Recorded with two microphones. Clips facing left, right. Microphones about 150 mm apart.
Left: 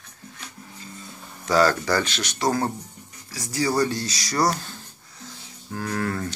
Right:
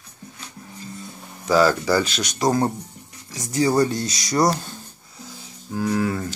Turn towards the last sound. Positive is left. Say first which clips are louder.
# right 4 dB
turn(degrees=-10)  # may be behind; listen again after turning